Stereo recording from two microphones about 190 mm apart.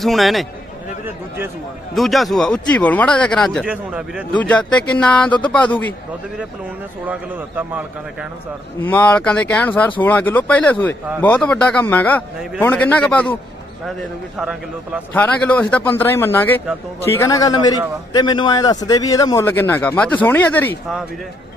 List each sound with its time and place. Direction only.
0.0 s speech: centre (ahead or behind)
2.0 s speech: centre (ahead or behind)
4.3 s a man's voice: 5° left (ahead or behind)
7.1 s a man's voice: 10° right (ahead or behind)
8.8 s a man's voice: 10° left (ahead or behind)
15.1 s a man's voice: 10° left (ahead or behind)